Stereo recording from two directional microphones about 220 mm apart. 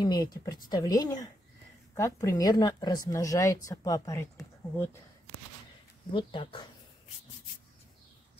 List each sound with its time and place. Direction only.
0.0 s a woman's voice: 20° left (ahead or behind)
6.1 s a woman's voice: 20° left (ahead or behind)